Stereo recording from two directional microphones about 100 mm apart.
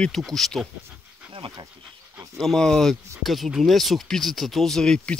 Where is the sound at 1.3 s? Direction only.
60° right (ahead or behind).